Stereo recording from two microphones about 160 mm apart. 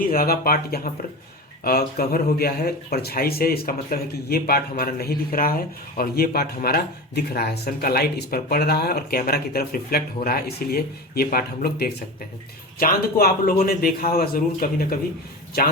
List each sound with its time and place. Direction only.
0.0 s speech: 65° left (ahead or behind)
15.5 s speech: 75° left (ahead or behind)